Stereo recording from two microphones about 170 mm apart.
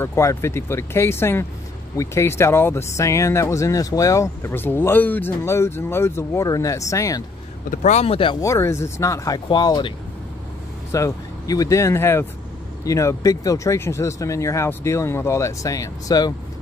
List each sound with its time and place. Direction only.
0.0 s speech: 15° left (ahead or behind)
7.7 s speech: 45° left (ahead or behind)
8.4 s speech: 15° left (ahead or behind)